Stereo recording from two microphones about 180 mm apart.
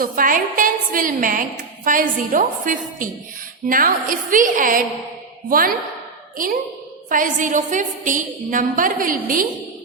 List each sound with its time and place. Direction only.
0.0 s a woman's voice: 50° right (ahead or behind)